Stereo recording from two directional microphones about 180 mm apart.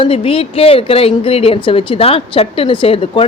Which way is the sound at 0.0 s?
30° left (ahead or behind).